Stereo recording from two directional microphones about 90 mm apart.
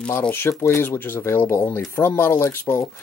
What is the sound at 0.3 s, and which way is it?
Speech, 25° left (ahead or behind).